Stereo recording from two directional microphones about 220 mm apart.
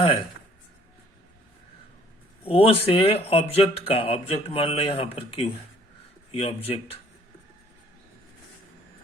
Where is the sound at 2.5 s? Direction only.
25° left (ahead or behind).